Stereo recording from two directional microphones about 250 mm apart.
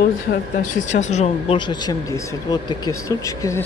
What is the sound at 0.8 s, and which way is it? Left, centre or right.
Speech, left.